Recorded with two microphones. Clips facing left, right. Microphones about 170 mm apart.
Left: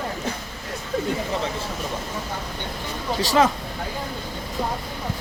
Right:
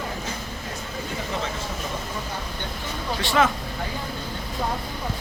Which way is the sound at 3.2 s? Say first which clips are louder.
Left 2 dB; 35° left (ahead or behind).